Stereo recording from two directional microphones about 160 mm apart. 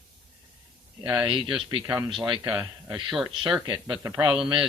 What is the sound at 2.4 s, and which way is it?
Speech, 5° right (ahead or behind).